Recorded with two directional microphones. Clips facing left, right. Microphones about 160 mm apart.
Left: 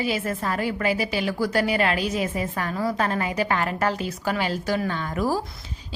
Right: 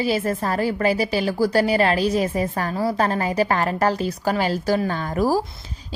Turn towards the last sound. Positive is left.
turn(degrees=-40)  # may be behind; listen again after turning